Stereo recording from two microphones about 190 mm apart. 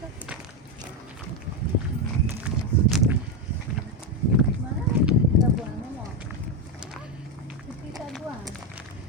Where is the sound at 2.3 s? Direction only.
5° right (ahead or behind).